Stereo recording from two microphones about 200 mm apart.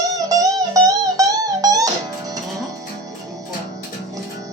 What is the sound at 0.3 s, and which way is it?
Music, 15° right (ahead or behind).